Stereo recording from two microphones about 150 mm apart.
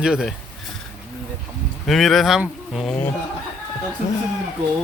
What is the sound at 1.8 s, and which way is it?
Speech, centre (ahead or behind).